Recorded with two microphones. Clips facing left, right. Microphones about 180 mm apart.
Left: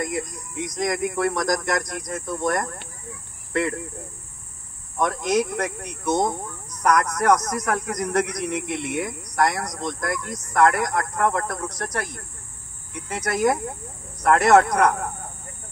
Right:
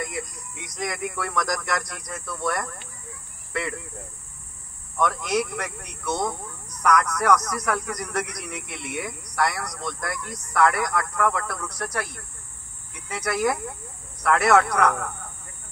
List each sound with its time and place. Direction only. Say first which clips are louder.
0.0 s speech: left 5 dB; 45° left (ahead or behind)
5.0 s speech: left 2 dB; 45° left (ahead or behind)